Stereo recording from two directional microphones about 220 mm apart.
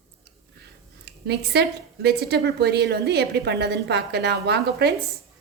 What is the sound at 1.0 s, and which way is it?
A woman's voice, 50° right (ahead or behind).